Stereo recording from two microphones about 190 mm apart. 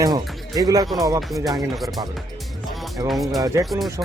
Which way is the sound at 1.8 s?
Centre (ahead or behind).